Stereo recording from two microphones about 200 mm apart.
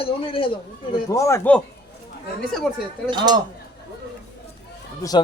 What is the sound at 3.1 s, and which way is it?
Speech, 20° right (ahead or behind).